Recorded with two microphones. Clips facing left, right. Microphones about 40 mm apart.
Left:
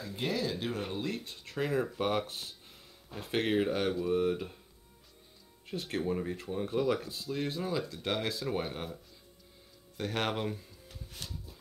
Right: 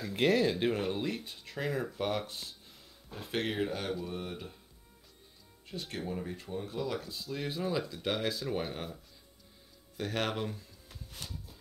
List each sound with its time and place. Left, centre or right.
0.5 s speech: right
1.2 s speech: centre
5.7 s speech: centre
6.5 s speech: left
7.2 s speech: centre